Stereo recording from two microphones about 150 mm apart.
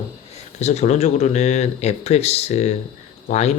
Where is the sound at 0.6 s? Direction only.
50° left (ahead or behind).